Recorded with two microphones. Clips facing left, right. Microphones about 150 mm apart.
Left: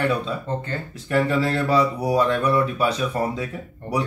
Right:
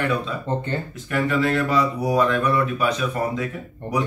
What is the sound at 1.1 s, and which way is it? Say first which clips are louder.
Speech: even; 30° left (ahead or behind).